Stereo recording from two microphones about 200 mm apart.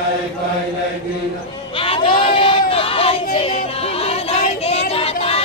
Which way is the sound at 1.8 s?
25° left (ahead or behind).